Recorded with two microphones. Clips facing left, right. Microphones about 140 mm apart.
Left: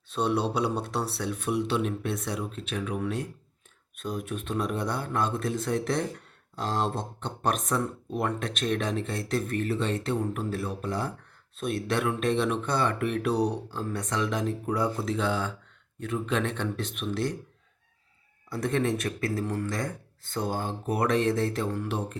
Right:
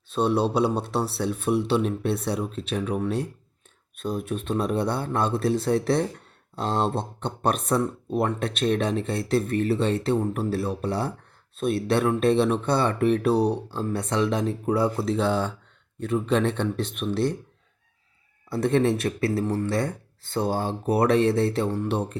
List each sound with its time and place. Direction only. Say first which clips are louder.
0.1 s speech: right 4 dB; 25° right (ahead or behind)
18.5 s speech: right 5 dB; 30° right (ahead or behind)